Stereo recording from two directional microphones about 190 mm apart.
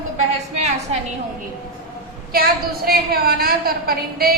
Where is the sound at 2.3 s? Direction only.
55° right (ahead or behind).